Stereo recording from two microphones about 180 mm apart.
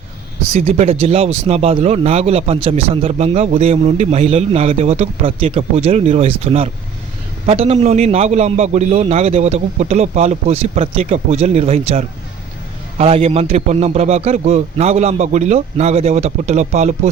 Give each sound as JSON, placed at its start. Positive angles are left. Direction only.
{"t": 0.8, "sound": "a man's voice", "side_deg": -35}